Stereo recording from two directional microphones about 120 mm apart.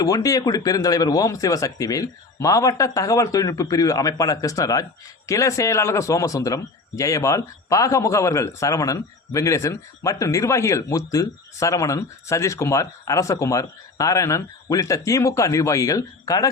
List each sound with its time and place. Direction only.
0.0 s speech: 30° left (ahead or behind)